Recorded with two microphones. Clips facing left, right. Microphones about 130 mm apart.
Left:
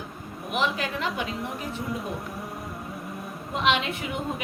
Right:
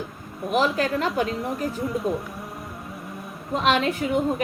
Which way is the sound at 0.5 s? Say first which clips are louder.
Right 6 dB; 40° right (ahead or behind).